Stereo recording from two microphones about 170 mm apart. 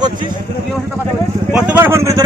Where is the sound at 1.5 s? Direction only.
10° right (ahead or behind).